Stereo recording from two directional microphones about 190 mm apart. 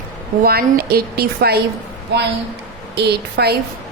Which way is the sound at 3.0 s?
60° right (ahead or behind).